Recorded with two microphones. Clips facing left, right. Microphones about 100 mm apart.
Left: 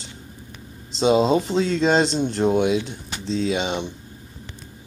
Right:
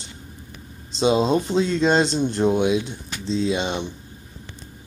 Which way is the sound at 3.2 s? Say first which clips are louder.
Right 1 dB; 65° left (ahead or behind).